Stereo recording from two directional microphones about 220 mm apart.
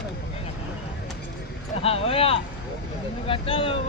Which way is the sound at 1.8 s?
25° left (ahead or behind).